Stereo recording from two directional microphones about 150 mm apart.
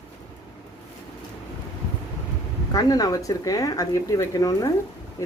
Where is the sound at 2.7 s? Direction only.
25° left (ahead or behind).